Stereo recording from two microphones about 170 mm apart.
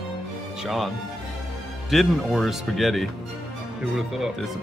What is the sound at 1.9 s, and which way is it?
Speech, centre (ahead or behind).